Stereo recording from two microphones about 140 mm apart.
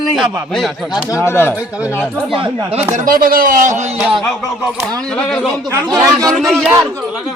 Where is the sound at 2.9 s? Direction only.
75° right (ahead or behind); by 3.9 s 55° right (ahead or behind).